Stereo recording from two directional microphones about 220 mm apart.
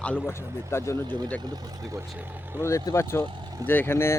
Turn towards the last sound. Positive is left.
turn(degrees=10)  # may be behind; listen again after turning